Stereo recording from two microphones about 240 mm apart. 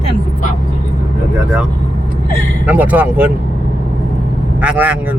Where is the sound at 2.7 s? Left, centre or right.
Centre.